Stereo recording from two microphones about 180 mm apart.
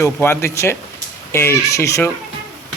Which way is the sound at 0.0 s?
15° left (ahead or behind).